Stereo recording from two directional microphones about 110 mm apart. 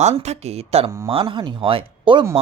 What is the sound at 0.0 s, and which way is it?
Speech, 85° right.